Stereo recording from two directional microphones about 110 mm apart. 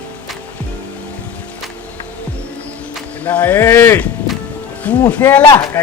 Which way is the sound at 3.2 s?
15° left (ahead or behind).